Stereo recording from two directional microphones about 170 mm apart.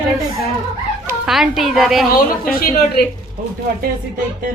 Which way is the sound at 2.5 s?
60° left (ahead or behind).